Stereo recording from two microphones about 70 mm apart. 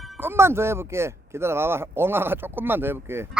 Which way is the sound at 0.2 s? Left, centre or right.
Right.